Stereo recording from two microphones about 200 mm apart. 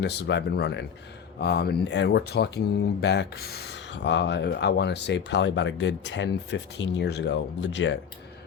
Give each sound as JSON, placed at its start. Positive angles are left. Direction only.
{"t": 0.0, "sound": "speech", "side_deg": 60}